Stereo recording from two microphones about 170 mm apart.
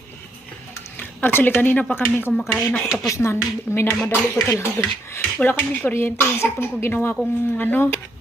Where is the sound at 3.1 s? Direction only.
15° left (ahead or behind).